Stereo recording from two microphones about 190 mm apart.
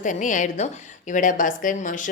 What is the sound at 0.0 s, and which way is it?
A woman's voice, 40° left (ahead or behind).